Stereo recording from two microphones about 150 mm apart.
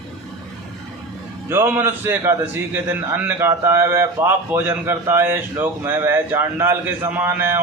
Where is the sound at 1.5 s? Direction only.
15° right (ahead or behind).